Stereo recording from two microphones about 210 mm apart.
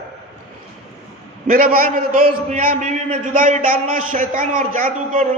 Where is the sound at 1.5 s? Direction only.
45° right (ahead or behind).